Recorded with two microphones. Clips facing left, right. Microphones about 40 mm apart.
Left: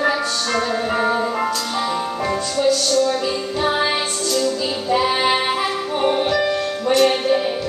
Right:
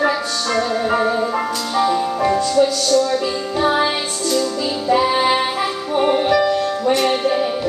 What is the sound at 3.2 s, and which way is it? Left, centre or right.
Music, centre.